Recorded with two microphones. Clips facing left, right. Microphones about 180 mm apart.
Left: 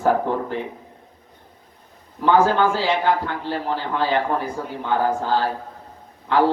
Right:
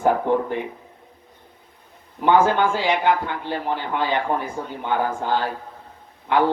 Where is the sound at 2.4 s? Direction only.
35° left (ahead or behind).